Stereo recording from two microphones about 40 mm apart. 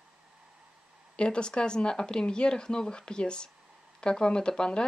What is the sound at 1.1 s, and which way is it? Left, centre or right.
Speech, left.